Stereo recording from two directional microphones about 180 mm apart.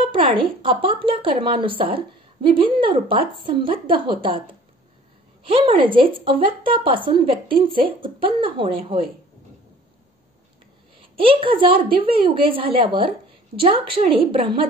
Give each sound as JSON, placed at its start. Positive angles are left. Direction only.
{"t": 0.0, "sound": "a woman's voice", "side_deg": -30}
{"t": 11.1, "sound": "a woman's voice", "side_deg": -30}